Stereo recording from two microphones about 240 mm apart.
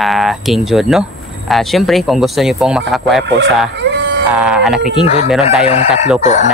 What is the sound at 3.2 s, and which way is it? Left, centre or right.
Speech, right.